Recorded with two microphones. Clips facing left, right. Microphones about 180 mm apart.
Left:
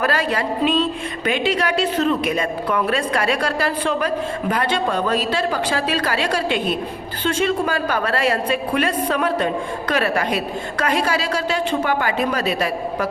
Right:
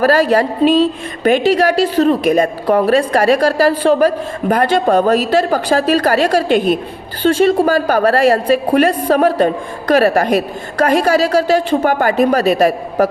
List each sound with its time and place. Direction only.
0.0 s a woman's voice: 40° right (ahead or behind)